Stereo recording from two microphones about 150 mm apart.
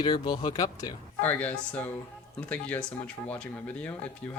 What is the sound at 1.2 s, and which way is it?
Speech, 10° left (ahead or behind).